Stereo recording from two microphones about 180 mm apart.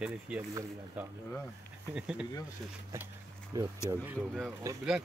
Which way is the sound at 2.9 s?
15° right (ahead or behind).